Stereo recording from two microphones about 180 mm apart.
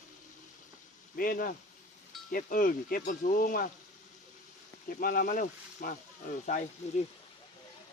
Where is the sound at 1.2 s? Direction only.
55° left (ahead or behind).